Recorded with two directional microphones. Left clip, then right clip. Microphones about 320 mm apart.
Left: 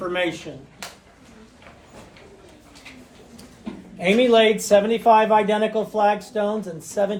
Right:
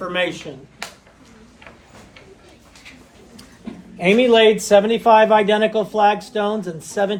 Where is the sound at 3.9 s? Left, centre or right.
Right.